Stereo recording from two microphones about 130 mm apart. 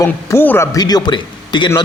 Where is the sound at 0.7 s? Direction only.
30° left (ahead or behind).